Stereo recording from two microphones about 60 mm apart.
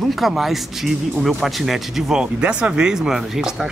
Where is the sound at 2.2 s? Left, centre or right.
Centre.